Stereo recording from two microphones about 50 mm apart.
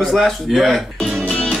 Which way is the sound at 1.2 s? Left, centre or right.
Left.